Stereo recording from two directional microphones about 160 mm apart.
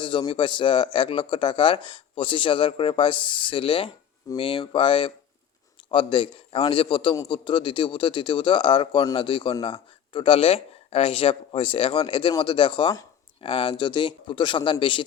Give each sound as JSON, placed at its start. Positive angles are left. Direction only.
{"t": 0.0, "sound": "a man's voice", "side_deg": 30}